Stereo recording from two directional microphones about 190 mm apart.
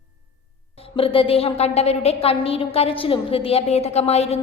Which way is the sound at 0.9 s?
30° left (ahead or behind).